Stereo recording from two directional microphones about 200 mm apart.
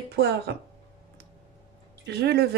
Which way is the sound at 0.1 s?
55° right (ahead or behind).